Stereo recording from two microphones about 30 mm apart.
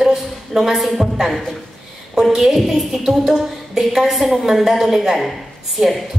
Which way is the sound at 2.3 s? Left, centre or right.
Centre.